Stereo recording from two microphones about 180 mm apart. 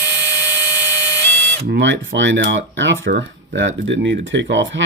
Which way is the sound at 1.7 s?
85° right.